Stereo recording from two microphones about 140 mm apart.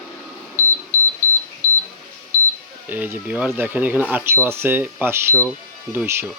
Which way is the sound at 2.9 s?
15° right (ahead or behind).